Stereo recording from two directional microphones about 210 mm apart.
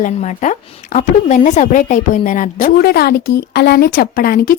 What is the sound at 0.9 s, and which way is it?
A woman's voice, 35° left (ahead or behind).